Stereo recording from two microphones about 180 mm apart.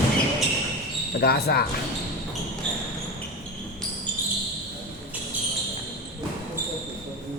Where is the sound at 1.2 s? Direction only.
60° left (ahead or behind).